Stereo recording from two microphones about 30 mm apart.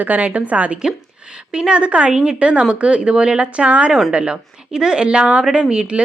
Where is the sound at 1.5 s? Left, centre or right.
Right.